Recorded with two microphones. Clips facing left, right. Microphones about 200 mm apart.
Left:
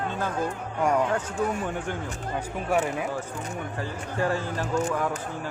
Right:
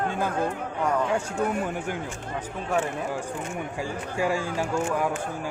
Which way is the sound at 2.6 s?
10° left (ahead or behind).